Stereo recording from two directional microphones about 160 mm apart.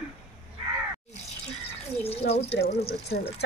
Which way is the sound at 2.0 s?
40° left (ahead or behind).